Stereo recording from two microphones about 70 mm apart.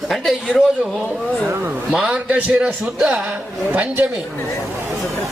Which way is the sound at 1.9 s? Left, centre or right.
Centre.